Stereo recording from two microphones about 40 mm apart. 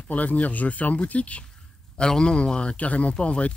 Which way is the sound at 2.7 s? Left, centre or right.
Left.